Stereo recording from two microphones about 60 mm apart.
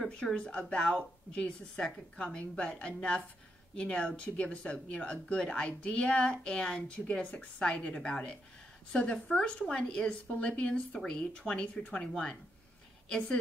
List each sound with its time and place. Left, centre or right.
0.0 s speech: centre